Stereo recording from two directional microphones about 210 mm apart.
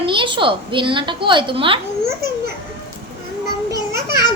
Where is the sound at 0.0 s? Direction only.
25° right (ahead or behind).